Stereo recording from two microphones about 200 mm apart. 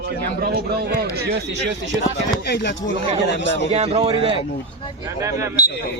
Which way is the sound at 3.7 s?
30° right (ahead or behind).